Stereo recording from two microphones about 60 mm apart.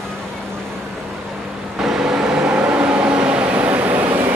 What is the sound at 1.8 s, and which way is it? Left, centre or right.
Vehicle, centre.